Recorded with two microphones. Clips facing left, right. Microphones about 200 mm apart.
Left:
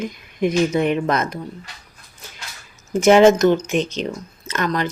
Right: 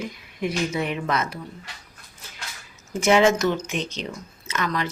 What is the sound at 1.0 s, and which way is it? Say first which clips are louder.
Speech: left 5 dB; 45° left (ahead or behind).